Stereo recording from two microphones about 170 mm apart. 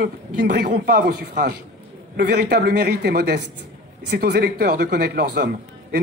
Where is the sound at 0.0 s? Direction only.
55° right (ahead or behind).